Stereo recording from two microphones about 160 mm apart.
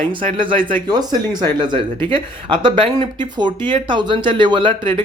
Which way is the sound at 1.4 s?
30° right (ahead or behind).